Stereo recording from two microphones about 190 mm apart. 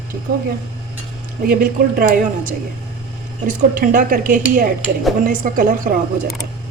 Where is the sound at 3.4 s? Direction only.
45° right (ahead or behind).